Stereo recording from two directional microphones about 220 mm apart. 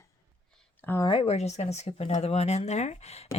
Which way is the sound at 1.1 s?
25° left (ahead or behind).